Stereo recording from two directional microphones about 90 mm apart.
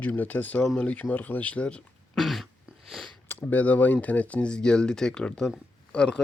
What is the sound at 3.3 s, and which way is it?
Speech, 20° left (ahead or behind).